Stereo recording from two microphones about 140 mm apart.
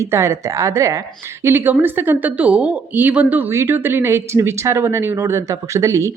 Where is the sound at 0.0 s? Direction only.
20° right (ahead or behind).